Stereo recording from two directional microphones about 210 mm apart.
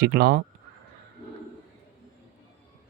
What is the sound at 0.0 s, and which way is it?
Speech, 45° right (ahead or behind).